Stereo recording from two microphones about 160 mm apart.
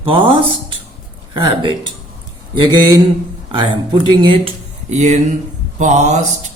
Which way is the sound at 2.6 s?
25° right (ahead or behind).